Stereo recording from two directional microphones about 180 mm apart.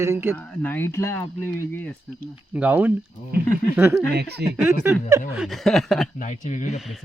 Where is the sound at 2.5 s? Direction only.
10° right (ahead or behind).